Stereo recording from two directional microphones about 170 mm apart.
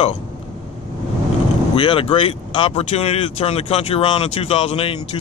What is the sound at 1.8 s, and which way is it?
Speech, 30° left (ahead or behind).